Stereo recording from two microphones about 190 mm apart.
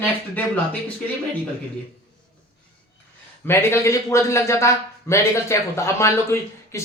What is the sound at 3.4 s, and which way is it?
Speech, 15° left (ahead or behind).